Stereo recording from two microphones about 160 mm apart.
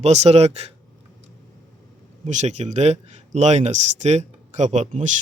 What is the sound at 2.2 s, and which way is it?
Speech, 45° right (ahead or behind).